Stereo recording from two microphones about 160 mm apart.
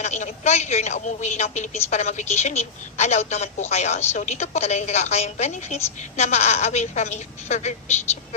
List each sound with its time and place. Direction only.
0.0 s a woman's voice: 45° left (ahead or behind)